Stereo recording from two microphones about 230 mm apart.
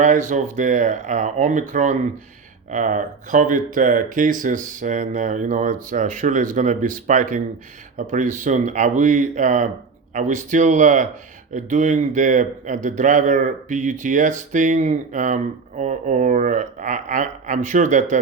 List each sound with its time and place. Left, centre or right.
0.0 s a man's voice: right